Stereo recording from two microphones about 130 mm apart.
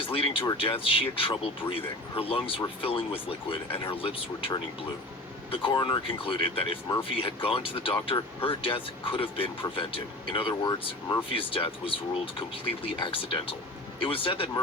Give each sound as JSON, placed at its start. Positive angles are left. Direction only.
{"t": 0.0, "sound": "speech", "side_deg": 45}